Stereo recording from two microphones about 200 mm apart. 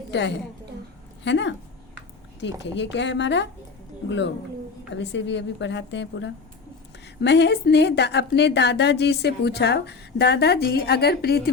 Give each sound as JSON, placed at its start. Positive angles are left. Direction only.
{"t": 0.1, "sound": "a woman's voice", "side_deg": 65}
{"t": 4.9, "sound": "speech", "side_deg": 65}